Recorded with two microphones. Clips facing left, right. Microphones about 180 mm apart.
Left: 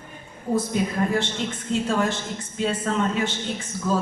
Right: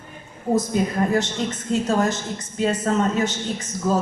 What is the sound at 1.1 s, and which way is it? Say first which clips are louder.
A woman's voice: right 3 dB; 40° right (ahead or behind).